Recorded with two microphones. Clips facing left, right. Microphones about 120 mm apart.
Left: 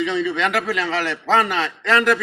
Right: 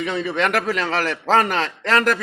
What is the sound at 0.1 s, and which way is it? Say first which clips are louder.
A man's voice: even; 40° right (ahead or behind).